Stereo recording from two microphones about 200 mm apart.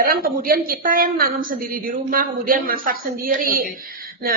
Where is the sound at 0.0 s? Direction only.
45° right (ahead or behind).